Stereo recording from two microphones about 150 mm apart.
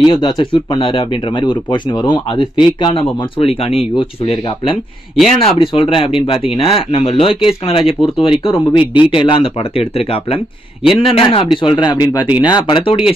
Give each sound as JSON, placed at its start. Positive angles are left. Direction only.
{"t": 0.1, "sound": "speech", "side_deg": 25}